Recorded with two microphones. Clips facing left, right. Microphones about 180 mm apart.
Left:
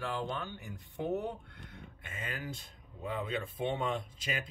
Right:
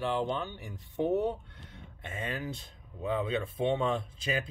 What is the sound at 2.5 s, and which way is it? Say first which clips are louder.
Speech: right 4 dB; 25° right (ahead or behind).